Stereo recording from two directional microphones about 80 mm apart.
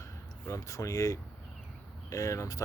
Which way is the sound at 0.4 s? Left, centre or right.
Left.